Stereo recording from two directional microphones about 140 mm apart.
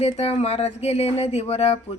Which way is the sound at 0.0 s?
50° left (ahead or behind).